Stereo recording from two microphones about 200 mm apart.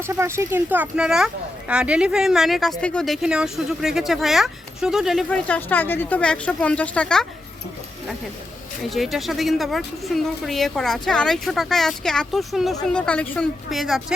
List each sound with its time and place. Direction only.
0.0 s speech: 15° right (ahead or behind); by 7.3 s 5° left (ahead or behind)
8.8 s speech: centre (ahead or behind)